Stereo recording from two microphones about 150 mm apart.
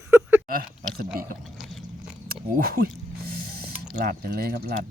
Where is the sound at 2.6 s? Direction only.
80° right.